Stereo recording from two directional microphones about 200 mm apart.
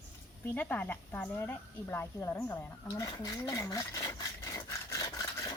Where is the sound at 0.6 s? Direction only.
10° left (ahead or behind).